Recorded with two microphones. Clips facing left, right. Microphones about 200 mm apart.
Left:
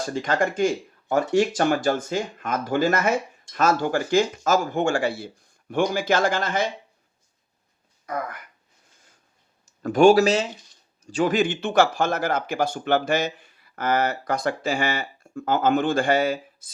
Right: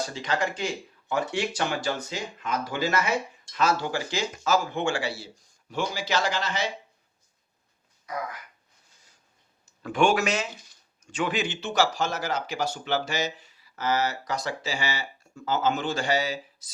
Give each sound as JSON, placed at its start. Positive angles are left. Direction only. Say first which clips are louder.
{"t": 0.0, "sound": "speech", "louder": "left 5 dB", "side_deg": 50}
{"t": 8.0, "sound": "speech", "louder": "left 4 dB", "side_deg": 55}
{"t": 9.8, "sound": "speech", "louder": "left 8 dB", "side_deg": 40}